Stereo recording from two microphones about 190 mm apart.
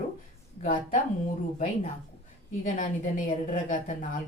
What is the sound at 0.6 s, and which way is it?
Speech, 45° left (ahead or behind).